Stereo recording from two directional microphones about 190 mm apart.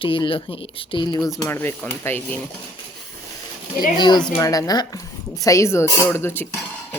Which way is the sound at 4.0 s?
25° left (ahead or behind).